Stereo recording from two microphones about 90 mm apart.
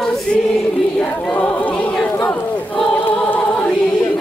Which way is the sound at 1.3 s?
15° left (ahead or behind).